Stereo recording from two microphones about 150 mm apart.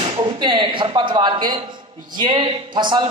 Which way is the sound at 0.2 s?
30° right (ahead or behind).